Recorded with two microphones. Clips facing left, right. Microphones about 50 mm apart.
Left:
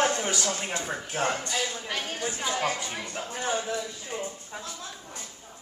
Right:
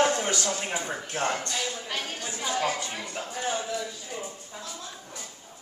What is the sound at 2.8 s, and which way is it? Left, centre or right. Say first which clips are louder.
Speech: even; centre.